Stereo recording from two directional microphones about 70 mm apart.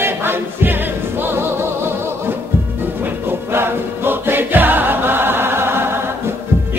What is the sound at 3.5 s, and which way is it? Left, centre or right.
Music, right.